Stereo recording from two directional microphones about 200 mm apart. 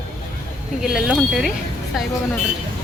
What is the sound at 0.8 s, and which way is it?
Speech, centre (ahead or behind).